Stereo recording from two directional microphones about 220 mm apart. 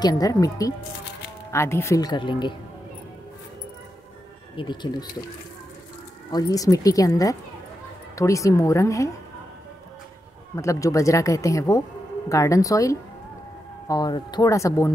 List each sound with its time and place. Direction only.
0.0 s speech: 15° left (ahead or behind)
4.6 s speech: 25° left (ahead or behind)
6.3 s speech: 15° left (ahead or behind)
10.5 s speech: 15° left (ahead or behind)